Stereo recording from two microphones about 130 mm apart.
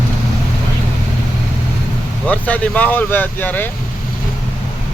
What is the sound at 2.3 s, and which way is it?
Speech, 10° left (ahead or behind).